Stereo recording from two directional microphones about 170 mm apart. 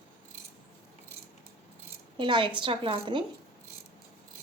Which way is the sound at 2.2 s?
30° right (ahead or behind).